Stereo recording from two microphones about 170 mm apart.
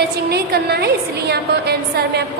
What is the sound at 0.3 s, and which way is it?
A woman's voice, 70° right (ahead or behind).